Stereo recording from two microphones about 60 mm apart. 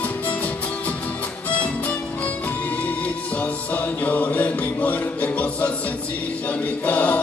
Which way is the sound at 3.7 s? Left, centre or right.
Left.